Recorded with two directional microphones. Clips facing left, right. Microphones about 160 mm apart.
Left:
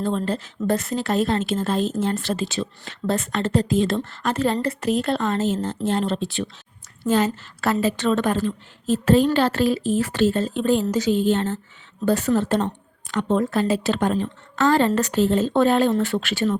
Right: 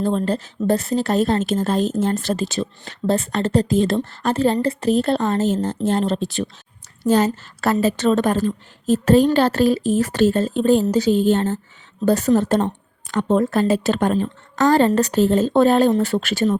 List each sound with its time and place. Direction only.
0.0 s a woman's voice: 40° right (ahead or behind)